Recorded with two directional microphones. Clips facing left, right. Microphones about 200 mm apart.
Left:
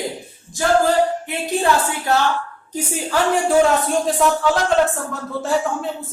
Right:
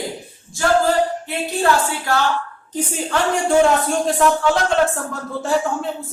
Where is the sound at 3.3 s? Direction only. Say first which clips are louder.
Even; centre (ahead or behind).